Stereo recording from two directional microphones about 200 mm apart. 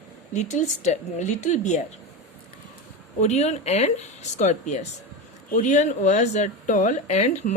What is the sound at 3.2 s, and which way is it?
Speech, 35° left (ahead or behind).